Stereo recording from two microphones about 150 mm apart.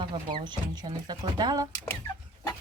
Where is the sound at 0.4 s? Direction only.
30° right (ahead or behind).